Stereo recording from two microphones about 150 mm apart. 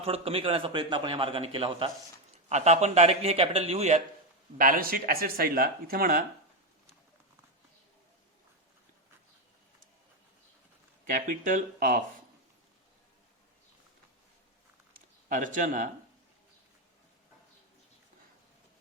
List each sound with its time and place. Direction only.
0.0 s a man's voice: 40° right (ahead or behind)
2.5 s a man's voice: 50° right (ahead or behind)
4.5 s speech: 70° right (ahead or behind)
11.0 s speech: 65° right (ahead or behind)
14.9 s a sound: 60° right (ahead or behind)